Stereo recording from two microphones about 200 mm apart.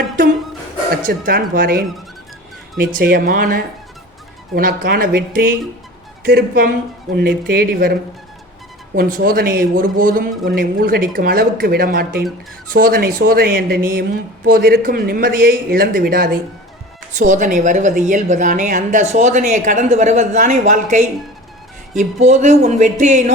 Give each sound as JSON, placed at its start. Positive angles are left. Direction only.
{"t": 1.0, "sound": "a man's voice", "side_deg": -45}
{"t": 3.0, "sound": "a man's voice", "side_deg": -45}
{"t": 9.0, "sound": "a man's voice", "side_deg": -45}